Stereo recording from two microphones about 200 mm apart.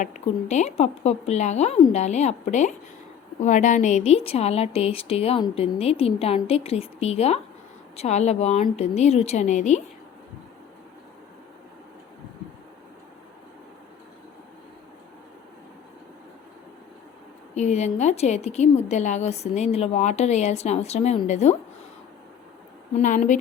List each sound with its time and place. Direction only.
0.0 s a woman's voice: 35° left (ahead or behind)
17.5 s a woman's voice: 35° left (ahead or behind)
23.0 s a woman's voice: 40° left (ahead or behind)